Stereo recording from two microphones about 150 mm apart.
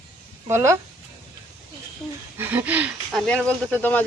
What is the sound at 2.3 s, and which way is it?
Speech, 15° right (ahead or behind).